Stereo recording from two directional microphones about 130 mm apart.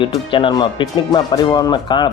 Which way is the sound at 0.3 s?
40° left (ahead or behind).